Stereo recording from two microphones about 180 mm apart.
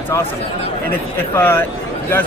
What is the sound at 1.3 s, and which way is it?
Speech, 10° left (ahead or behind).